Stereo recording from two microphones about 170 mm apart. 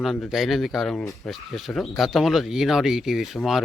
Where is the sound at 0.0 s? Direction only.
Centre (ahead or behind).